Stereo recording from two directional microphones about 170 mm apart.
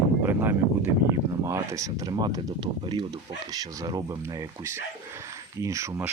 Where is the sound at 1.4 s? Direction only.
20° right (ahead or behind).